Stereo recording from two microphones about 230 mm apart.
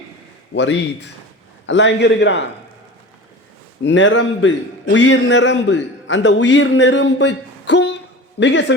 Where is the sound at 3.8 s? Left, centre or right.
Left.